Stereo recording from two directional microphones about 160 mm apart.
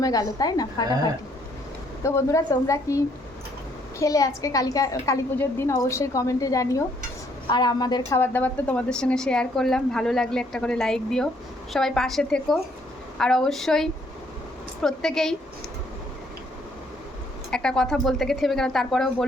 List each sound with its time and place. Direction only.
0.0 s a woman's voice: 20° left (ahead or behind)
2.0 s a woman's voice: 20° left (ahead or behind)
8.2 s a woman's voice: 10° left (ahead or behind)
17.5 s a woman's voice: 5° left (ahead or behind)